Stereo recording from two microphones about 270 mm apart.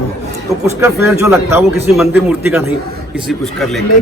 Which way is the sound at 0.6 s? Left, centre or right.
Centre.